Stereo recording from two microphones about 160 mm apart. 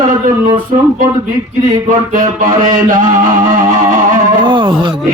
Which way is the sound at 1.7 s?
55° right (ahead or behind).